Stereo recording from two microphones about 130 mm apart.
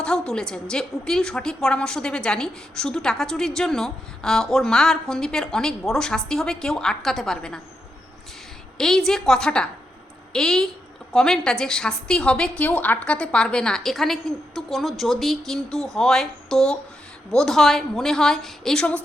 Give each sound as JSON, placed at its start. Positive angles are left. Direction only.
{"t": 0.0, "sound": "a woman's voice", "side_deg": 5}
{"t": 8.8, "sound": "a woman's voice", "side_deg": 5}